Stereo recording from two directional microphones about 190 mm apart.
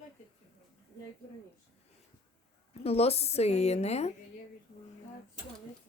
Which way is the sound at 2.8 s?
30° left (ahead or behind).